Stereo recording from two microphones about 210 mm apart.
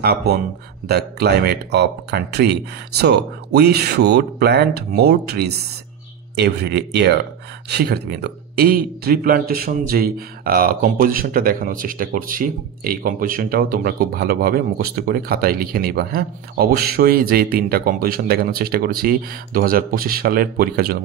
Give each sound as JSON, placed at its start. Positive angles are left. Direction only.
{"t": 0.0, "sound": "speech", "side_deg": -50}